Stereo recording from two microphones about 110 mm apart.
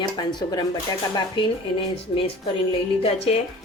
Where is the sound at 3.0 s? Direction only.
65° left (ahead or behind).